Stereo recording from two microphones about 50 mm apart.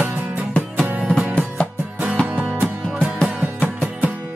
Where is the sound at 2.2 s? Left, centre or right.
Right.